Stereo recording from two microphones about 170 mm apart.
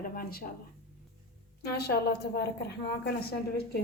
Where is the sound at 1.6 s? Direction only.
75° left (ahead or behind).